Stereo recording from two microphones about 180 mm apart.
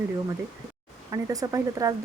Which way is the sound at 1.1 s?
20° right (ahead or behind).